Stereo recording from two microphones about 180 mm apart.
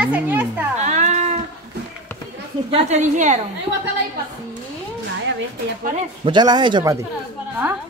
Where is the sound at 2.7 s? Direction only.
40° right (ahead or behind).